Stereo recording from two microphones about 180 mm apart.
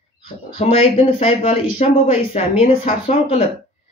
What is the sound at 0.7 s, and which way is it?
Speech, 30° left (ahead or behind).